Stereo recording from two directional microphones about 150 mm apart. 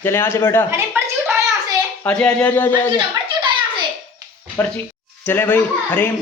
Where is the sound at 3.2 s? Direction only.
30° right (ahead or behind).